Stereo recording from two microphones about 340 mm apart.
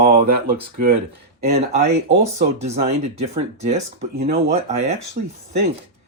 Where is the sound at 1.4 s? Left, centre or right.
Right.